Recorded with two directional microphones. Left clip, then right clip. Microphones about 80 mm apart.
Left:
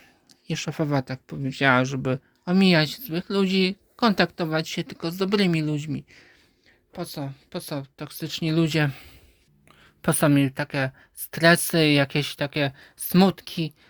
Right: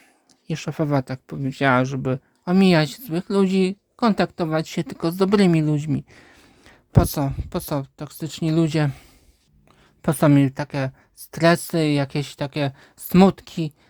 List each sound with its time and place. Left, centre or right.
0.4 s speech: right
2.4 s speech: right
3.6 s speech: right
4.6 s speech: right
7.5 s speech: right
7.9 s speech: right
10.1 s speech: right
11.7 s speech: centre